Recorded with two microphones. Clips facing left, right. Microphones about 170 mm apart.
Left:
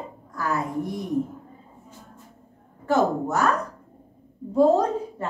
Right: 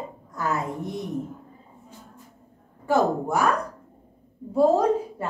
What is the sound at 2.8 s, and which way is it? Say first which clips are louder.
Speech: even; 10° right (ahead or behind).